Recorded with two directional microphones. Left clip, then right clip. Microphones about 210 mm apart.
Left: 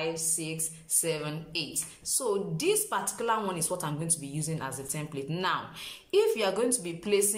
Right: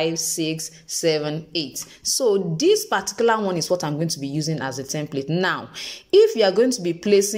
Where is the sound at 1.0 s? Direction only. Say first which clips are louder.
Right 13 dB; 35° right (ahead or behind).